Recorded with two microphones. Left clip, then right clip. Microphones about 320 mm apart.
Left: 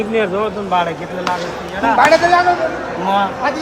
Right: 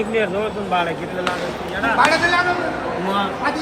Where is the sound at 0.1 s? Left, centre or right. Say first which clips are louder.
Left 3 dB; left.